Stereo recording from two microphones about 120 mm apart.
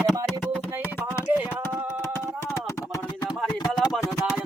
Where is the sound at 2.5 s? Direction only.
30° left (ahead or behind).